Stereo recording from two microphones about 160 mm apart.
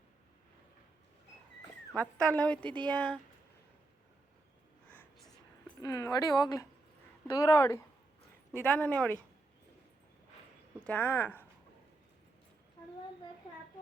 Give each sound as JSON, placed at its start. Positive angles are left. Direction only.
{"t": 1.9, "sound": "a woman's voice", "side_deg": 10}
{"t": 4.9, "sound": "a sound", "side_deg": 10}
{"t": 5.8, "sound": "a woman's voice", "side_deg": 20}
{"t": 10.8, "sound": "a woman's voice", "side_deg": 10}